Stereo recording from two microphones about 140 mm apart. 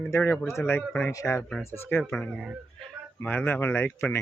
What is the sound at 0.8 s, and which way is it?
Speech, 10° left (ahead or behind).